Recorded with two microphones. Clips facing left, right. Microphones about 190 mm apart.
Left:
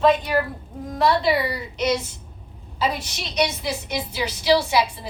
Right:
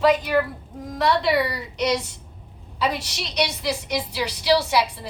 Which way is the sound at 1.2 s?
65° right (ahead or behind).